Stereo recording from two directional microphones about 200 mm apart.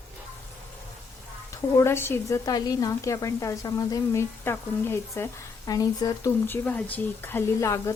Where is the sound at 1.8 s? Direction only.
10° left (ahead or behind).